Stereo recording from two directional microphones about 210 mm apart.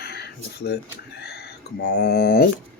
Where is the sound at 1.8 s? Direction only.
50° left (ahead or behind).